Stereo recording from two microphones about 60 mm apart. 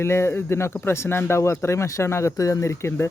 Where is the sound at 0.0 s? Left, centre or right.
Left.